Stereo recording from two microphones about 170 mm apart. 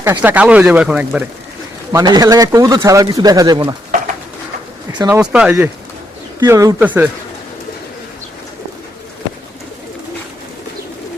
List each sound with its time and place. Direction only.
0.0 s speech: 10° right (ahead or behind)
1.9 s speech: 20° right (ahead or behind)
5.0 s speech: 10° right (ahead or behind)
6.4 s speech: 20° right (ahead or behind)